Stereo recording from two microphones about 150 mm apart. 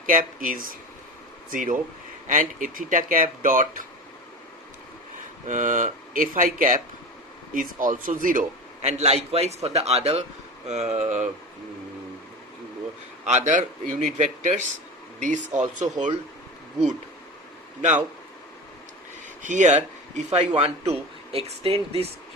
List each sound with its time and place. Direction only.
0.0 s speech: 65° right (ahead or behind)
5.5 s speech: 55° right (ahead or behind)
8.8 s speech: 45° right (ahead or behind)
13.2 s speech: 50° right (ahead or behind)
19.4 s speech: 55° right (ahead or behind)